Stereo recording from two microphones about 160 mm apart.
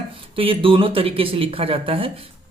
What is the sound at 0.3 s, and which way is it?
Speech, 35° right (ahead or behind).